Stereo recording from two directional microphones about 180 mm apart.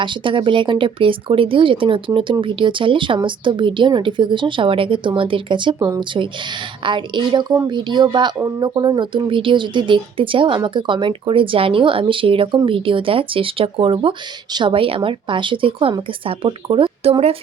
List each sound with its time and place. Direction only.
0.0 s speech: 25° right (ahead or behind)